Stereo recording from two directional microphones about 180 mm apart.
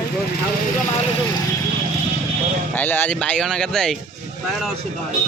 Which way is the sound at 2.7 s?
10° left (ahead or behind).